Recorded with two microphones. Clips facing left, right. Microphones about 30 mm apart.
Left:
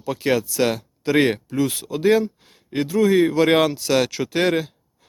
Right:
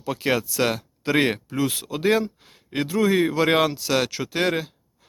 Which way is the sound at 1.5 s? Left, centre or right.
Centre.